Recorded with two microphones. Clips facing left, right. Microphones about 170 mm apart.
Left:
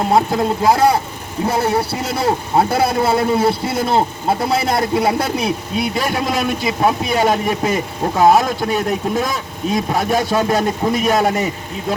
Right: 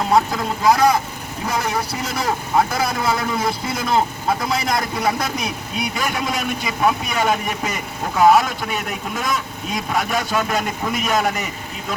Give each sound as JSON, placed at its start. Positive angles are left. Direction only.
{"t": 0.1, "sound": "a man's voice", "side_deg": 25}